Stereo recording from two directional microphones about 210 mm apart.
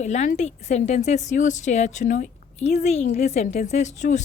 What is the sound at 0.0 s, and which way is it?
A woman's voice, 35° left (ahead or behind).